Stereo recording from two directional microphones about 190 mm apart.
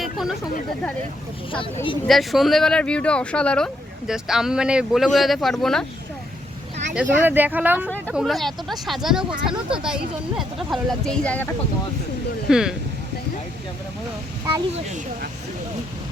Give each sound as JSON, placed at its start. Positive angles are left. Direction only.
{"t": 0.0, "sound": "a sound", "side_deg": 0}
{"t": 1.5, "sound": "speech", "side_deg": 25}
{"t": 2.0, "sound": "speech", "side_deg": 0}
{"t": 6.9, "sound": "speech", "side_deg": -10}
{"t": 7.9, "sound": "speech", "side_deg": 10}
{"t": 12.5, "sound": "speech", "side_deg": -5}